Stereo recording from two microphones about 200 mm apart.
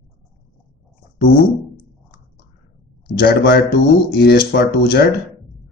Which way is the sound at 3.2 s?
50° left (ahead or behind).